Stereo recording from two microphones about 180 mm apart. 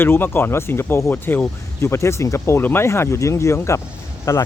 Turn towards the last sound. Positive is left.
turn(degrees=15)  # may be behind; listen again after turning